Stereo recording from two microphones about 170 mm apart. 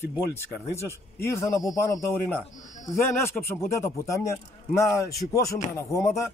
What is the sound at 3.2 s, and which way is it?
Speech, 15° left (ahead or behind).